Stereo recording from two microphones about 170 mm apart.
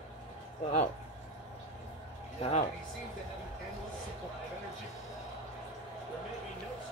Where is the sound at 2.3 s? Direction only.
40° left (ahead or behind).